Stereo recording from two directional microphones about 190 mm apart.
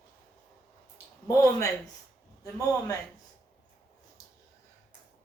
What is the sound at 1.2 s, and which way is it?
Speech, 15° left (ahead or behind).